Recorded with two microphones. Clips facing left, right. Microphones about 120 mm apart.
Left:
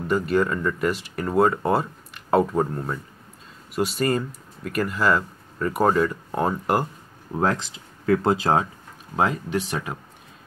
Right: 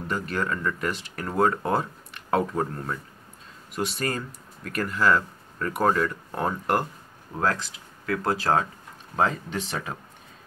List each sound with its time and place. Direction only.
0.1 s speech: 5° left (ahead or behind)
7.3 s speech: 20° left (ahead or behind)